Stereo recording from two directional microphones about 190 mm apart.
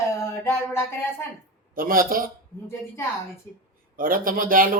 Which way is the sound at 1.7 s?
50° right (ahead or behind).